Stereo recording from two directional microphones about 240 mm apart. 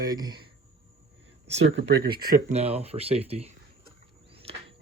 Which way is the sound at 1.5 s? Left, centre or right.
Right.